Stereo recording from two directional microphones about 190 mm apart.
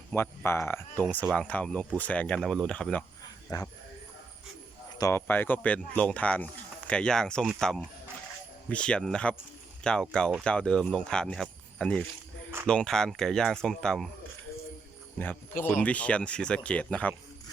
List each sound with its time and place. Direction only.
0.1 s speech: 10° left (ahead or behind)
3.5 s speech: 20° left (ahead or behind)
4.9 s speech: 15° left (ahead or behind)
15.6 s speech: 10° left (ahead or behind)